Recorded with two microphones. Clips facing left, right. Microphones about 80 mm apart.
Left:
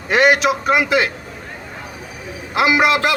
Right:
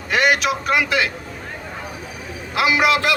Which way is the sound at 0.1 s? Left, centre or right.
Left.